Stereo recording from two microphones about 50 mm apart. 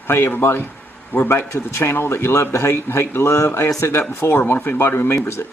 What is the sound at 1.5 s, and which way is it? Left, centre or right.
Speech, left.